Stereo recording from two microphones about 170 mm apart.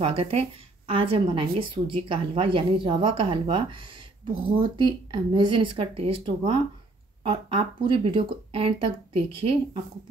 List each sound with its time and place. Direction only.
0.0 s speech: 35° right (ahead or behind)